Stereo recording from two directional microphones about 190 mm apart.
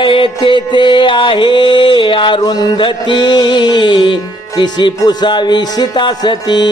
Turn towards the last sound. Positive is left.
turn(degrees=20)  # may be behind; listen again after turning